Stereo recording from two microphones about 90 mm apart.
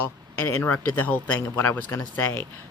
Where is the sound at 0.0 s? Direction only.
25° left (ahead or behind).